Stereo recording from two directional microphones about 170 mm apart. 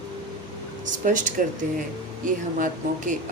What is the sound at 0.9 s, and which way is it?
Speech, 50° right (ahead or behind).